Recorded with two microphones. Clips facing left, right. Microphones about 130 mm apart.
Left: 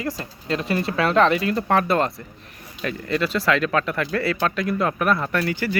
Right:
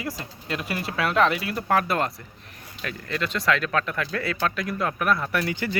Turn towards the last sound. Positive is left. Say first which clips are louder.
# left 3 dB
turn(degrees=-20)  # may be behind; listen again after turning